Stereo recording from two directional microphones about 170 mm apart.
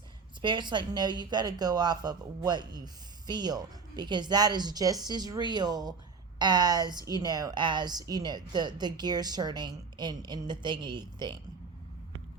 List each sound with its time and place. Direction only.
0.4 s speech: 25° right (ahead or behind)